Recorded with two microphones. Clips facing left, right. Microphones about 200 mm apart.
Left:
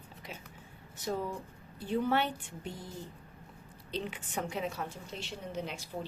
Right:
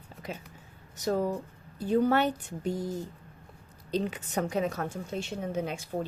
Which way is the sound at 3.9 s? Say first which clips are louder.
Right 7 dB; 40° right (ahead or behind).